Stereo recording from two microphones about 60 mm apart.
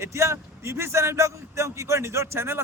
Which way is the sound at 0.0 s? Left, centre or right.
Right.